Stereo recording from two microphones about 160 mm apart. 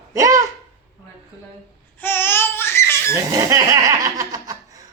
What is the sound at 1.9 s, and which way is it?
Laughter, 15° left (ahead or behind).